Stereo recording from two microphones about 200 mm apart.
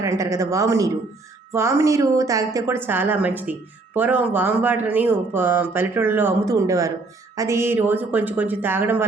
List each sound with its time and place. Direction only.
0.0 s a woman's voice: 15° right (ahead or behind)